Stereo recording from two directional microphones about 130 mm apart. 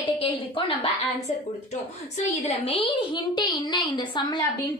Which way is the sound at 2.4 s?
50° left (ahead or behind).